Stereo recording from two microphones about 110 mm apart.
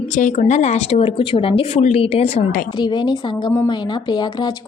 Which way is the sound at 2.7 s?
45° left (ahead or behind).